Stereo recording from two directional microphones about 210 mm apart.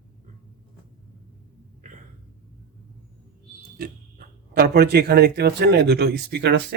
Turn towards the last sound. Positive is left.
turn(degrees=-55)  # may be behind; listen again after turning